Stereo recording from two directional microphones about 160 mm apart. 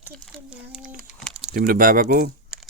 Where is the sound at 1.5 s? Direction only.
60° right (ahead or behind).